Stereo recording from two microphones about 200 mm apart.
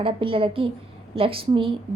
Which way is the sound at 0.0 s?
25° right (ahead or behind).